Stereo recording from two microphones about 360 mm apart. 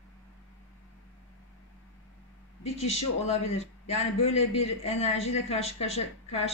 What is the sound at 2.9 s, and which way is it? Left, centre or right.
A man's voice, centre.